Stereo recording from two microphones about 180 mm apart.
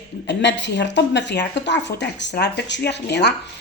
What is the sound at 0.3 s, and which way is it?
A woman's voice, 85° left.